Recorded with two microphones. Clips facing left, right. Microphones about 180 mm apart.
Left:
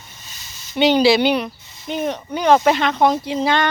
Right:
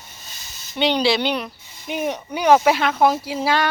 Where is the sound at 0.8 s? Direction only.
5° left (ahead or behind).